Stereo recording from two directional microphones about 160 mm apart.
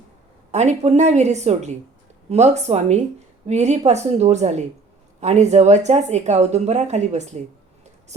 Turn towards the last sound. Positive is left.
turn(degrees=-45)  # may be behind; listen again after turning